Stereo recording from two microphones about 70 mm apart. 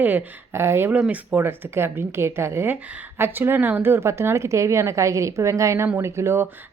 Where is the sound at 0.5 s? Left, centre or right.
Right.